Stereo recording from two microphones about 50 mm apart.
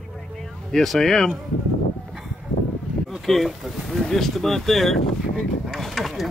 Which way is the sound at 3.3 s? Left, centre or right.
Centre.